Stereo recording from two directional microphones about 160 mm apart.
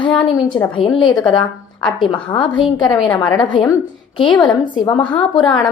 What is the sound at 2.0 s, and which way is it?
A woman's voice, 30° left (ahead or behind).